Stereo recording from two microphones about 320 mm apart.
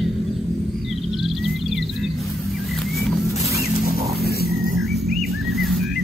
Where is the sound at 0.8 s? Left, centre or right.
Centre.